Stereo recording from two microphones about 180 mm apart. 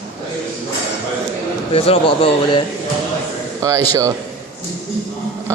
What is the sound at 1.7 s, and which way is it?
Speech, 35° left (ahead or behind).